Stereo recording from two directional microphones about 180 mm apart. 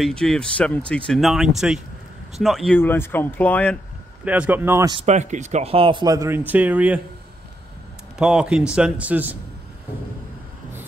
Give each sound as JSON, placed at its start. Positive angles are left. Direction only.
{"t": 0.0, "sound": "speech", "side_deg": 5}
{"t": 2.8, "sound": "speech", "side_deg": 10}
{"t": 4.2, "sound": "speech", "side_deg": -10}
{"t": 4.9, "sound": "speech", "side_deg": -40}
{"t": 8.2, "sound": "speech", "side_deg": -5}